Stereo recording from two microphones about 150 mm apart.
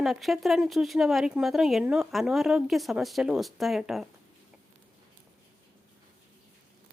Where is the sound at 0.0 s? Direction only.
Centre (ahead or behind).